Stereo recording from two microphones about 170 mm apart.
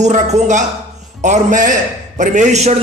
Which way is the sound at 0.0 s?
40° right (ahead or behind).